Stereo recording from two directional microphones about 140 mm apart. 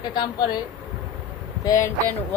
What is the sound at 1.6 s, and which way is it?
Speech, 25° left (ahead or behind).